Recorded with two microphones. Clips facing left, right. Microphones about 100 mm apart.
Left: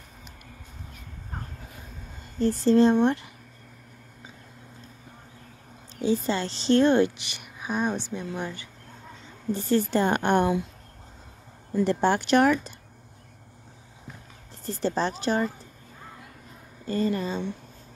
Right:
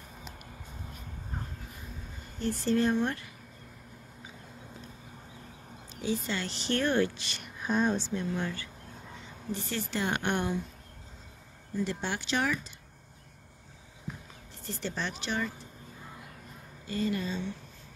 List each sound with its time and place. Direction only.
2.3 s a woman's voice: 35° left (ahead or behind)
5.9 s a woman's voice: 30° left (ahead or behind); by 8.6 s 15° left (ahead or behind)
9.5 s a woman's voice: 40° left (ahead or behind)
11.8 s a woman's voice: 50° left (ahead or behind)
14.6 s speech: 40° left (ahead or behind)
16.8 s speech: 40° left (ahead or behind)